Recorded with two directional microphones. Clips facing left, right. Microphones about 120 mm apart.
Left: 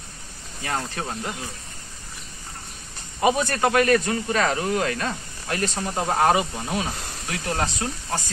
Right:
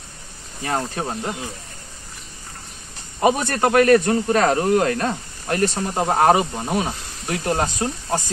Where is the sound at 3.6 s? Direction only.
40° right (ahead or behind).